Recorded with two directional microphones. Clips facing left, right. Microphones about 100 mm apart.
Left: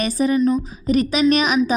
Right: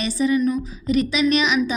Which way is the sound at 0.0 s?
45° left (ahead or behind).